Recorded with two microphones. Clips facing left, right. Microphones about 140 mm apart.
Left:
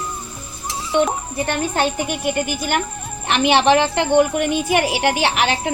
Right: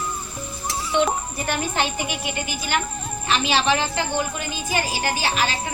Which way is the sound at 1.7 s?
50° left (ahead or behind).